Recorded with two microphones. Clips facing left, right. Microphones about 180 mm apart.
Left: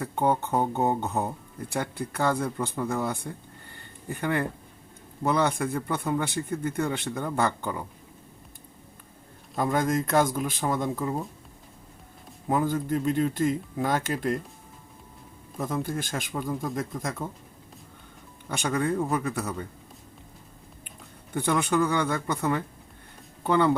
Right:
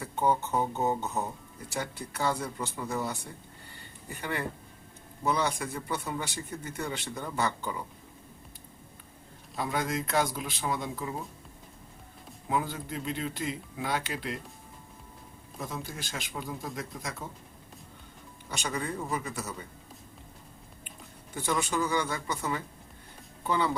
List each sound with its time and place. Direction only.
0.0 s a man's voice: 55° left (ahead or behind)
9.6 s speech: 50° left (ahead or behind)
12.5 s speech: 45° left (ahead or behind)
15.5 s speech: 50° left (ahead or behind)
18.4 s a man's voice: 55° left (ahead or behind)
21.3 s a man's voice: 60° left (ahead or behind)